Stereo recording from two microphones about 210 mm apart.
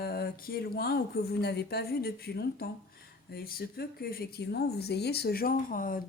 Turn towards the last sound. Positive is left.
turn(degrees=40)  # may be behind; listen again after turning